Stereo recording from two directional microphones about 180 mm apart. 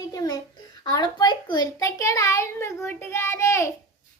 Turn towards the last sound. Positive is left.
turn(degrees=15)  # may be behind; listen again after turning